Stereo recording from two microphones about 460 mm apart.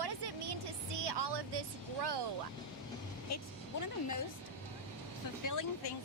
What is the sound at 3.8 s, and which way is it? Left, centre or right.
Speech, left.